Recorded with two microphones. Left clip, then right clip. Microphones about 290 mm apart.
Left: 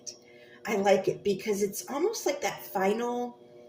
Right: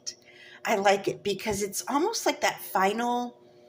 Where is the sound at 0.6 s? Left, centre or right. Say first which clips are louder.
Right 1 dB; right.